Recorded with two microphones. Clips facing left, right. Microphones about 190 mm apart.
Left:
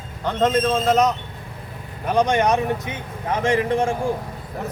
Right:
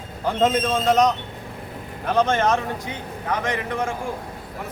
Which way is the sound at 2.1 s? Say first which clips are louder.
Left 1 dB; 15° left (ahead or behind).